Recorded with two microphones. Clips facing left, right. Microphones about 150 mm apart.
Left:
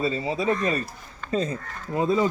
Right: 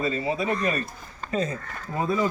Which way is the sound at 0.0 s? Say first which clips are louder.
Left 1 dB; 25° left (ahead or behind).